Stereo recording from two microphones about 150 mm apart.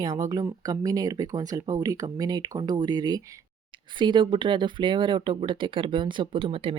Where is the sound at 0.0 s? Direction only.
25° right (ahead or behind).